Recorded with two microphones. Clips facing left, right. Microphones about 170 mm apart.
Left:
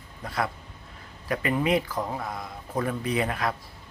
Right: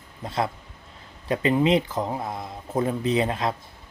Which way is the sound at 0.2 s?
25° right (ahead or behind).